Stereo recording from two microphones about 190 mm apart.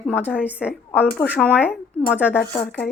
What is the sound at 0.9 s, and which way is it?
Speech, 10° left (ahead or behind).